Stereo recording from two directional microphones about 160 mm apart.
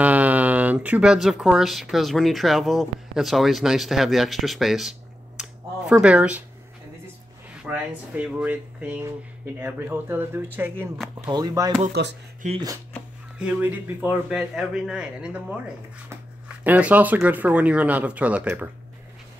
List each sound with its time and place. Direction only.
0.0 s speech: 10° right (ahead or behind)
5.4 s a sound: 5° right (ahead or behind)
7.6 s a man's voice: 10° right (ahead or behind)
11.2 s speech: 25° right (ahead or behind)
11.9 s speech: 90° right
12.4 s speech: 50° right (ahead or behind)
13.4 s a man's voice: 10° right (ahead or behind)